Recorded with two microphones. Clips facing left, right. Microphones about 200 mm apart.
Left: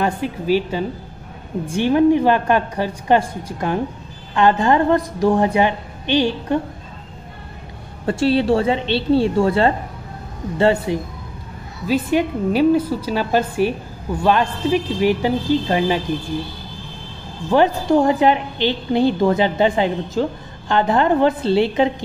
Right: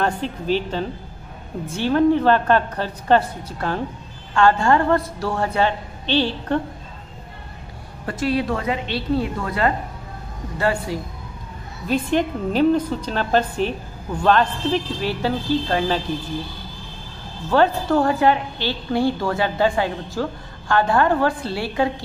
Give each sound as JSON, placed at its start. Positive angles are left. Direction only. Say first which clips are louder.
{"t": 0.0, "sound": "a woman's voice", "louder": "left 2 dB", "side_deg": 10}
{"t": 8.1, "sound": "a woman's voice", "louder": "left 6 dB", "side_deg": 30}
{"t": 11.9, "sound": "a woman's voice", "louder": "left 2 dB", "side_deg": 10}
{"t": 17.5, "sound": "a woman's voice", "louder": "left 2 dB", "side_deg": 15}